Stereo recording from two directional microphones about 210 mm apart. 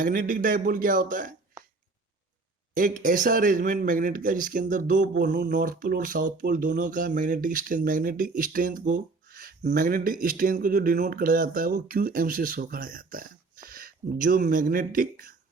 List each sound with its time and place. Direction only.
0.0 s speech: 40° right (ahead or behind)
2.7 s speech: 40° right (ahead or behind)